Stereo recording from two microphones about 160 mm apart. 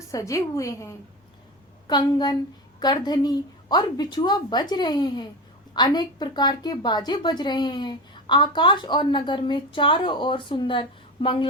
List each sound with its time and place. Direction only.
0.1 s a woman's voice: 20° left (ahead or behind)